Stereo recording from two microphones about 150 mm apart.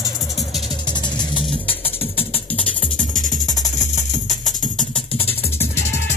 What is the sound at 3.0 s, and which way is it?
Music, 60° left (ahead or behind).